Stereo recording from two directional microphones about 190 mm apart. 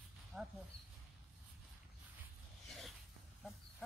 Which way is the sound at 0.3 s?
5° right (ahead or behind).